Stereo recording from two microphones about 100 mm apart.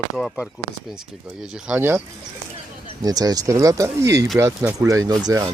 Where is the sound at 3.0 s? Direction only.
40° right (ahead or behind).